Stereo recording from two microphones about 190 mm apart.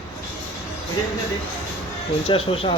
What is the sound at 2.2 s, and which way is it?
Speech, 30° left (ahead or behind).